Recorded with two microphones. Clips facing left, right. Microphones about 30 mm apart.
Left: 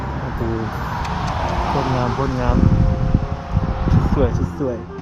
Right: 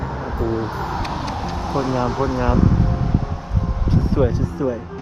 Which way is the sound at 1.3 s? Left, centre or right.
Left.